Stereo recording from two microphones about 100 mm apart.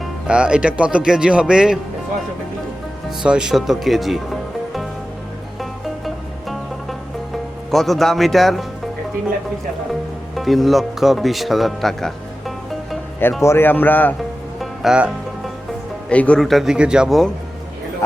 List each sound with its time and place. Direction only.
0.0 s speech: 10° right (ahead or behind)
3.2 s speech: 5° right (ahead or behind)
7.7 s speech: centre (ahead or behind)
10.3 s speech: centre (ahead or behind)
13.4 s speech: 25° left (ahead or behind)
14.6 s music: centre (ahead or behind)
16.0 s speech: 10° left (ahead or behind)
16.4 s speech: centre (ahead or behind)